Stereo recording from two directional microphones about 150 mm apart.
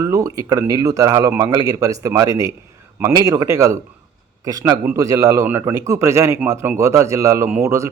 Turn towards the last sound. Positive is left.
turn(degrees=-20)  # may be behind; listen again after turning